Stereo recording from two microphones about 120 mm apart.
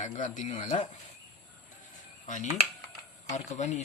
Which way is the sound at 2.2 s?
90° left.